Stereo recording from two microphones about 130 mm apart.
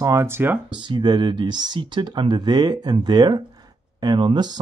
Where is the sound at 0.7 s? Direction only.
35° right (ahead or behind).